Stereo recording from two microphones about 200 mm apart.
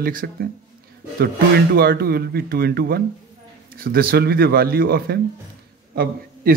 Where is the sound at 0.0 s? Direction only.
45° right (ahead or behind).